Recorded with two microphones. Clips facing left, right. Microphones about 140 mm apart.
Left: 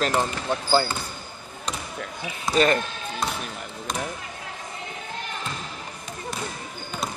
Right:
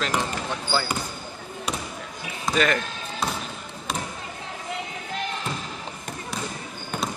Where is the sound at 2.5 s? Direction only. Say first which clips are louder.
Left 2 dB; centre (ahead or behind).